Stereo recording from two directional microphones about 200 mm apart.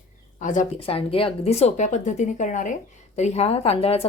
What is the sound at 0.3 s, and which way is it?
A woman's voice, 40° left (ahead or behind).